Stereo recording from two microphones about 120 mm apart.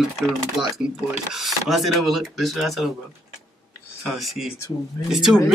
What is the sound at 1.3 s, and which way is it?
Speech, centre (ahead or behind).